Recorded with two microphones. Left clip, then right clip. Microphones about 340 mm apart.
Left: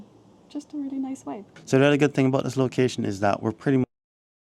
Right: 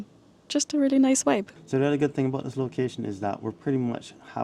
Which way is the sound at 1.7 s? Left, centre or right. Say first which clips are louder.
Left 5 dB; left.